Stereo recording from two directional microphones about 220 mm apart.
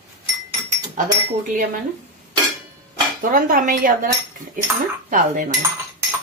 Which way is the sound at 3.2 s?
40° right (ahead or behind).